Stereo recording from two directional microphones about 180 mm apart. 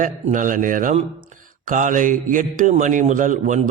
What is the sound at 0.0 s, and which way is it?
Speech, 45° right (ahead or behind).